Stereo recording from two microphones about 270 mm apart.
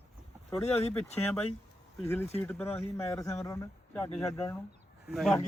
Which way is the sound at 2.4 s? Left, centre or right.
Centre.